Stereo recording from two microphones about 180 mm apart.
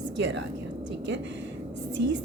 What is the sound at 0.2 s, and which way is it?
Speech, 80° right.